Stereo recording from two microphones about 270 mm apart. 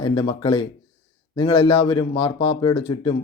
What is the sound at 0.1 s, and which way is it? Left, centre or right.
Speech, centre.